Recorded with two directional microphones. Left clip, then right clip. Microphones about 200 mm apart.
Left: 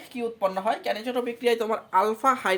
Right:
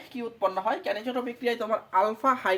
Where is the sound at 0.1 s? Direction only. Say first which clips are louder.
Left 2 dB; 35° left (ahead or behind).